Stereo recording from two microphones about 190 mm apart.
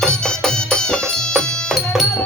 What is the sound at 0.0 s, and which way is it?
Music, 5° left (ahead or behind).